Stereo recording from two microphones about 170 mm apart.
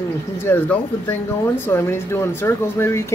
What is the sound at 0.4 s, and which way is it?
Speech, 10° left (ahead or behind).